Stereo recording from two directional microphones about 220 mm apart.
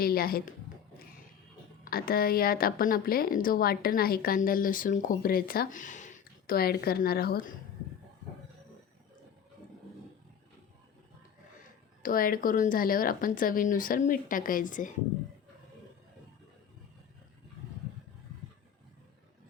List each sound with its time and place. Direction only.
0.0 s a woman's voice: 45° left (ahead or behind)
1.8 s a woman's voice: 40° left (ahead or behind)
12.0 s a woman's voice: 40° left (ahead or behind)